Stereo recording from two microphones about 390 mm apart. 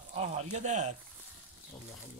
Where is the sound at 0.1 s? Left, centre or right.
Centre.